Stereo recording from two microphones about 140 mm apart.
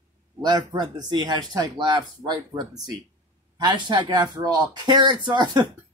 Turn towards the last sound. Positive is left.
turn(degrees=-30)  # may be behind; listen again after turning